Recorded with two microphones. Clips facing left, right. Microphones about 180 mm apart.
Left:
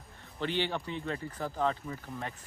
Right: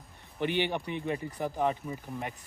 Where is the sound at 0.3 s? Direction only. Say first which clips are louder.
Right 3 dB; 15° right (ahead or behind).